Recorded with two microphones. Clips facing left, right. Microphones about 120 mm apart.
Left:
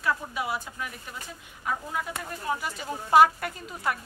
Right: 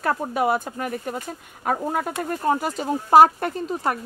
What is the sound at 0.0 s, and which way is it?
Speech, 50° right (ahead or behind).